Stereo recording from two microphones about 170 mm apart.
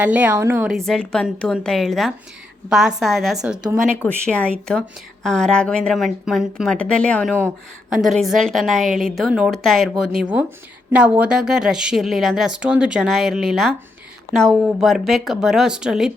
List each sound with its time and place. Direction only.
0.0 s a woman's voice: 10° right (ahead or behind)
0.7 s speech: centre (ahead or behind)